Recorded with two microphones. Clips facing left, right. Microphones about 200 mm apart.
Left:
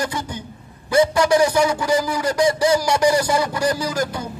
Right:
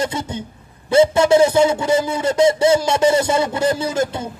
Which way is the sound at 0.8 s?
25° right (ahead or behind).